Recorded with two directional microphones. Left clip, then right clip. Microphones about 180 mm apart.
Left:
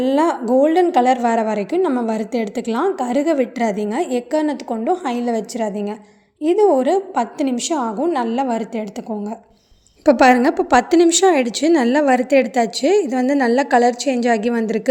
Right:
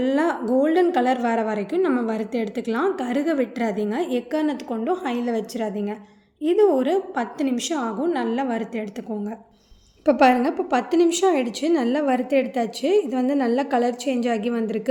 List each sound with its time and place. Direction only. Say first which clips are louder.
0.0 s a woman's voice: left 5 dB; 30° left (ahead or behind)
10.1 s a woman's voice: left 5 dB; 45° left (ahead or behind)